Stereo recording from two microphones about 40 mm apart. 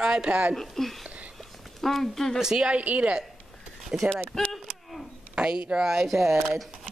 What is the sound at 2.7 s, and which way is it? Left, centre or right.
Speech, right.